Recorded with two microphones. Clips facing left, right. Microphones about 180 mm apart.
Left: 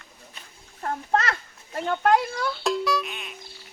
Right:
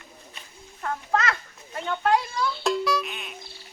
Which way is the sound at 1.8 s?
50° left (ahead or behind).